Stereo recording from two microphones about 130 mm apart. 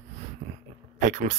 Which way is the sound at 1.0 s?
70° right (ahead or behind).